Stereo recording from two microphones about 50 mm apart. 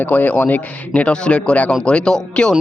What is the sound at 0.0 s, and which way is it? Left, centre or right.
A man's voice, left.